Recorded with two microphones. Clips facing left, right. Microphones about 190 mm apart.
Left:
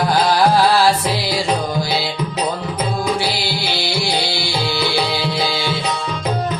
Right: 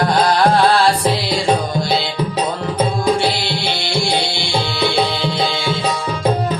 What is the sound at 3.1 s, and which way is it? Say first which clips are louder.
Tabla: right 2 dB; 5° left (ahead or behind).